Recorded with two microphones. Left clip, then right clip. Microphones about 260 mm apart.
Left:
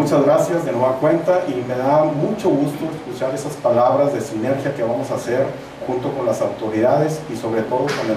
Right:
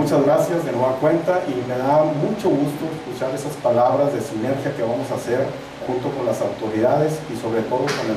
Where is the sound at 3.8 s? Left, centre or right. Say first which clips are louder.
Left 2 dB; centre.